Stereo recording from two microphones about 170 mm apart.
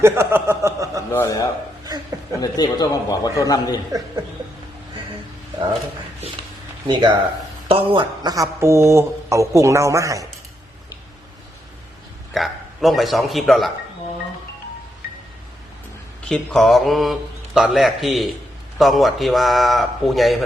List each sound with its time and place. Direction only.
0.0 s chuckle: 15° right (ahead or behind)
1.1 s a man's voice: 20° left (ahead or behind)
6.8 s speech: 25° right (ahead or behind)
12.3 s a man's voice: centre (ahead or behind)
16.3 s a man's voice: centre (ahead or behind)